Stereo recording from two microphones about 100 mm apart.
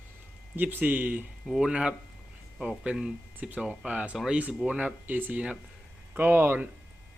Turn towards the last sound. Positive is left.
turn(degrees=-25)  # may be behind; listen again after turning